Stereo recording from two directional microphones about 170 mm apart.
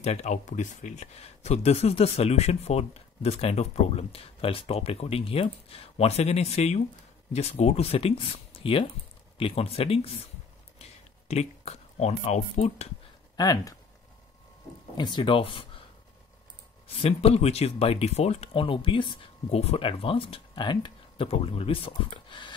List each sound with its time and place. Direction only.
0.0 s speech: 40° left (ahead or behind)
13.4 s speech: 20° left (ahead or behind)
15.0 s speech: 25° left (ahead or behind)
16.8 s speech: 35° left (ahead or behind)